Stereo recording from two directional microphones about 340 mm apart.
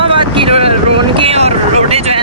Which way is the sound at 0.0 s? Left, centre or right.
Centre.